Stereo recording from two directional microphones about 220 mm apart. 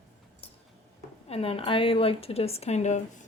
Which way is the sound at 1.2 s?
25° left (ahead or behind).